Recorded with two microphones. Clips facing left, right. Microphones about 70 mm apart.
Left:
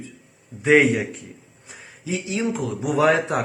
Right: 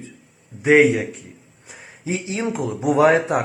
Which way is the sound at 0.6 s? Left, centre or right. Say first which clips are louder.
Right 2 dB; centre.